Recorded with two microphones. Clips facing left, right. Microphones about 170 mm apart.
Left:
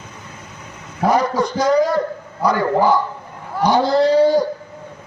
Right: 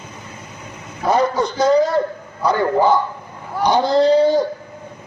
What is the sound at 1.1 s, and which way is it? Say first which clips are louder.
Speech: right 2 dB; 25° right (ahead or behind).